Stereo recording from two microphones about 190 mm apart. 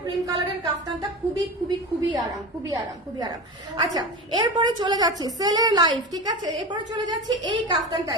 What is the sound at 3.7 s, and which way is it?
A woman's voice, 20° right (ahead or behind).